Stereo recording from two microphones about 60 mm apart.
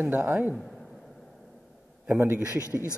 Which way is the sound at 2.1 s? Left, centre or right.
Right.